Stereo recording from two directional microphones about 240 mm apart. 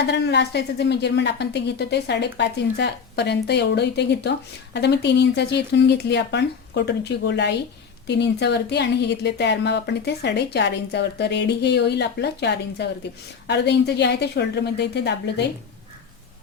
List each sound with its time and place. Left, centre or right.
0.1 s a woman's voice: left